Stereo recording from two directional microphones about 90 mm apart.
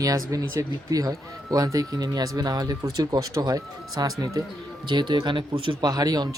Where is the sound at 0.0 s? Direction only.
40° right (ahead or behind).